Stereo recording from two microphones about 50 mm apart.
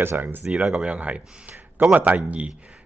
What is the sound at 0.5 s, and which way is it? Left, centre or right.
Speech, centre.